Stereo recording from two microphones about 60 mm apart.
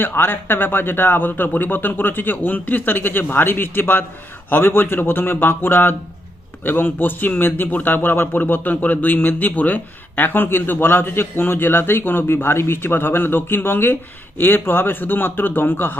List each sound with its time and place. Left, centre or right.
0.0 s a man's voice: left